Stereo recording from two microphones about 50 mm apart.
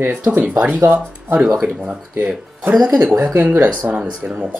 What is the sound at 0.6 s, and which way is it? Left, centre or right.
Speech, right.